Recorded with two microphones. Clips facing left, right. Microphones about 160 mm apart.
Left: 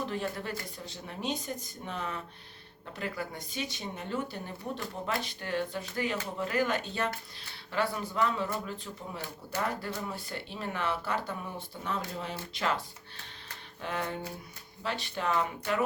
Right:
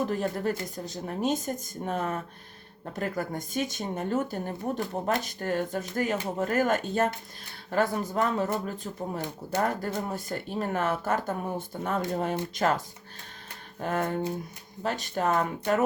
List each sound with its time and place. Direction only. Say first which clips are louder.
0.0 s speech: right 6 dB; 45° right (ahead or behind)